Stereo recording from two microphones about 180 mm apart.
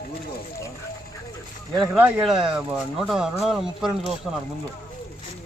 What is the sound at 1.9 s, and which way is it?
Speech, 5° right (ahead or behind).